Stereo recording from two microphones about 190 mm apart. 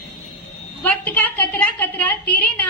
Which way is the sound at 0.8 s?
10° left (ahead or behind).